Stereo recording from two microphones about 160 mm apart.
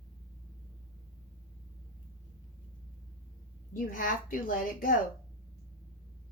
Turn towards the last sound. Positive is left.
turn(degrees=60)  # may be behind; listen again after turning